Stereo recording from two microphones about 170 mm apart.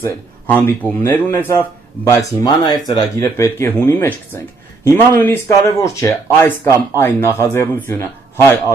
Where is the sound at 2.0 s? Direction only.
20° left (ahead or behind).